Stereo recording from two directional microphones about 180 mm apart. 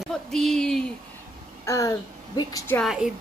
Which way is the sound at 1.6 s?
15° left (ahead or behind).